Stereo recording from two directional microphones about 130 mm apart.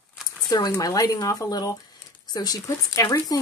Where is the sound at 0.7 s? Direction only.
30° left (ahead or behind).